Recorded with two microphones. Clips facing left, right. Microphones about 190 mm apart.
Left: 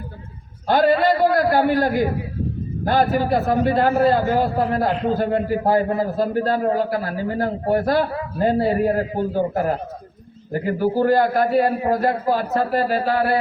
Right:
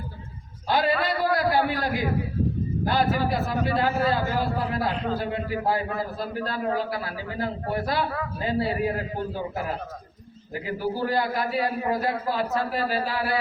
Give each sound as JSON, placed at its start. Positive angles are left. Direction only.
{"t": 0.7, "sound": "a man's voice", "side_deg": 50}